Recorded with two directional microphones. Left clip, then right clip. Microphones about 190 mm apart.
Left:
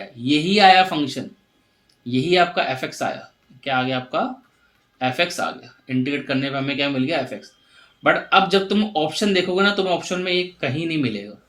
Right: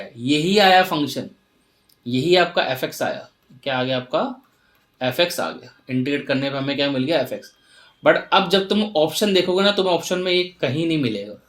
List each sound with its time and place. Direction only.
0.3 s speech: 35° right (ahead or behind)
2.0 s speech: 40° right (ahead or behind)